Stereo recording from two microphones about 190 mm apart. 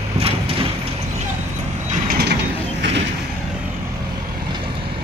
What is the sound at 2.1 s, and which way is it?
Mechanisms, 60° right (ahead or behind).